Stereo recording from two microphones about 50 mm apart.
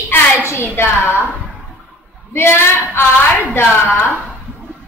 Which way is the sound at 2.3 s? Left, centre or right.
Left.